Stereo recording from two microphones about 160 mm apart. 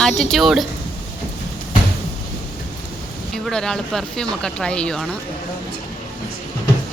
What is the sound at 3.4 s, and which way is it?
Speech, 5° left (ahead or behind).